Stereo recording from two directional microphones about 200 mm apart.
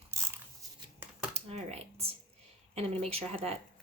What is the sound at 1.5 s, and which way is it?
Speech, 30° right (ahead or behind).